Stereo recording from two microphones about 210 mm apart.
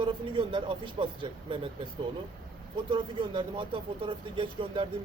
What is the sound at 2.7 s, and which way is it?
Speech, 25° right (ahead or behind).